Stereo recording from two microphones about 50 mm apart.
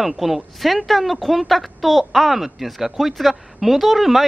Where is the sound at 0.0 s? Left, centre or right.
Centre.